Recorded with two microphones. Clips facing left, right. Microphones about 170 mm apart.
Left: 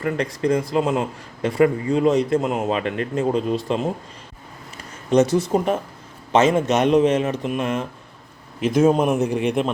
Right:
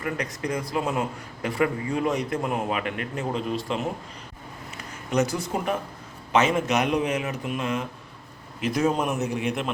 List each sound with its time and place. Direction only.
0.0 s a man's voice: 25° left (ahead or behind)
5.1 s a man's voice: 25° left (ahead or behind)
8.6 s a man's voice: 50° left (ahead or behind)
9.2 s a man's voice: 5° right (ahead or behind)